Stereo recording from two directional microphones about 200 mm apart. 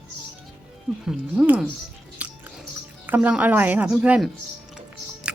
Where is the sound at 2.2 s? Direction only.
5° right (ahead or behind).